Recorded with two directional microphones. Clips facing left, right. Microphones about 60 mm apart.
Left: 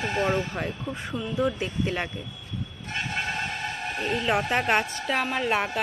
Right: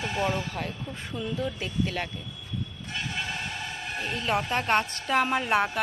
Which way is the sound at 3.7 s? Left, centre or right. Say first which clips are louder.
Left 4 dB; left.